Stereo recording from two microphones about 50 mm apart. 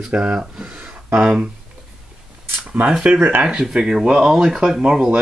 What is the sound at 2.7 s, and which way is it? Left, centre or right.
Speech, right.